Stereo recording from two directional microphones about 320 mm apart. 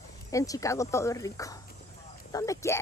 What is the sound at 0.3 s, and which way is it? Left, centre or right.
Speech, centre.